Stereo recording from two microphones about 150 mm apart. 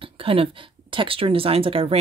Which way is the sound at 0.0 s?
40° right (ahead or behind).